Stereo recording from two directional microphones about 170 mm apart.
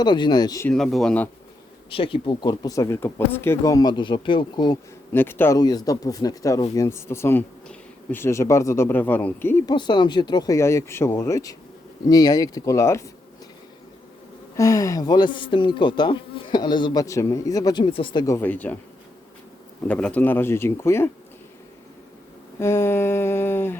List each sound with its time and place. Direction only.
0.0 s speech: 25° left (ahead or behind)
0.7 s speech: centre (ahead or behind)
1.9 s speech: 30° left (ahead or behind)
5.1 s speech: 10° left (ahead or behind)
9.7 s speech: 25° left (ahead or behind)
14.5 s speech: 20° left (ahead or behind)
18.3 s speech: 10° left (ahead or behind)
19.9 s speech: 5° left (ahead or behind)
22.5 s a sound: 15° left (ahead or behind)